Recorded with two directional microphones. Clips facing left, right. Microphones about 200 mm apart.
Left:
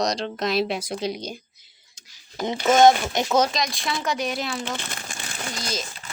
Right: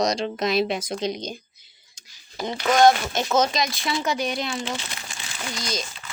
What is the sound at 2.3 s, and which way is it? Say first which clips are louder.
Speech: left 2 dB; 20° left (ahead or behind).